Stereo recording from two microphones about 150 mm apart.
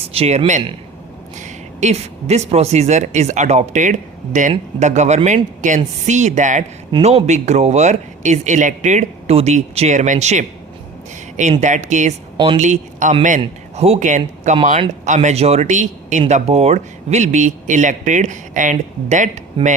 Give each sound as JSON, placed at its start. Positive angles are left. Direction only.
{"t": 0.1, "sound": "speech", "side_deg": -45}
{"t": 11.6, "sound": "speech", "side_deg": -55}
{"t": 13.4, "sound": "a man's voice", "side_deg": -40}
{"t": 19.6, "sound": "speech", "side_deg": -35}